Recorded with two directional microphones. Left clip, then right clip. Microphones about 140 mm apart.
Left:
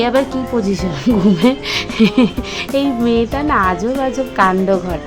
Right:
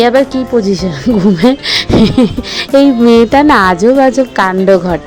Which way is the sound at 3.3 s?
65° right (ahead or behind).